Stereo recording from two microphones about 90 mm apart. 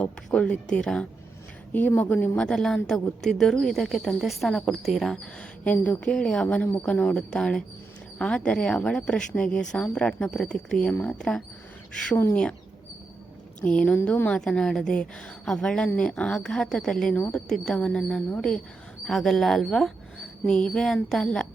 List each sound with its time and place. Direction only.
0.3 s a woman's voice: 10° left (ahead or behind)
2.0 s speech: 20° left (ahead or behind)
2.4 s a woman's voice: 5° left (ahead or behind)
6.1 s a woman's voice: 5° left (ahead or behind)
6.6 s a woman's voice: 15° left (ahead or behind)
13.6 s a woman's voice: 10° left (ahead or behind)
13.8 s speech: 20° left (ahead or behind)
14.3 s a woman's voice: 10° left (ahead or behind)
17.2 s a woman's voice: 15° left (ahead or behind)